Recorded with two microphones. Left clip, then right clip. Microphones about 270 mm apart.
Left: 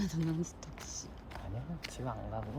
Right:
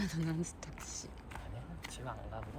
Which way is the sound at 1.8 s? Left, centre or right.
Left.